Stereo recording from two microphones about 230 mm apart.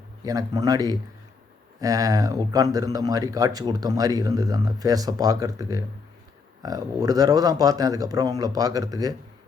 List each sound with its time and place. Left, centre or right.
0.3 s speech: centre